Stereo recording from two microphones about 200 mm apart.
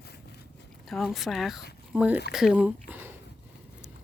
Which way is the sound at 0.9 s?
Centre (ahead or behind).